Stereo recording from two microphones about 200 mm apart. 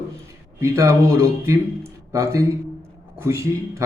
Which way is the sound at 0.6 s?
15° right (ahead or behind).